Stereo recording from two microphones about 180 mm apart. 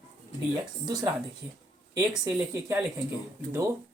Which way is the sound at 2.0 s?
20° right (ahead or behind).